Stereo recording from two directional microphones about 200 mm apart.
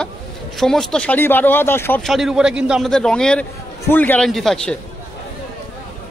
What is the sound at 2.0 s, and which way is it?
A man's voice, centre (ahead or behind).